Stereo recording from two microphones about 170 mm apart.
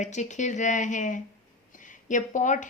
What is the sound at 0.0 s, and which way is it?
Speech, 45° left (ahead or behind).